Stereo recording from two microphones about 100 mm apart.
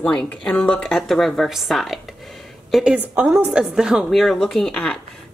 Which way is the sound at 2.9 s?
15° right (ahead or behind).